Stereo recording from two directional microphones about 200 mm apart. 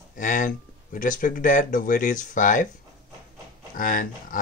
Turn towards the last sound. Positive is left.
turn(degrees=45)  # may be behind; listen again after turning